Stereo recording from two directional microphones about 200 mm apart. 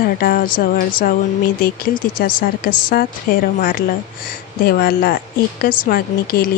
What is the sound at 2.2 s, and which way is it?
A woman's voice, 50° left (ahead or behind).